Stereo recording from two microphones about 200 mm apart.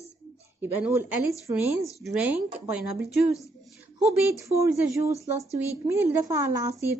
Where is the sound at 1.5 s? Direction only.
20° right (ahead or behind).